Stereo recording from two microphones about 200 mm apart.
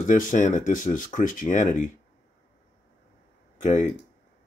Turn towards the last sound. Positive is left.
turn(degrees=35)  # may be behind; listen again after turning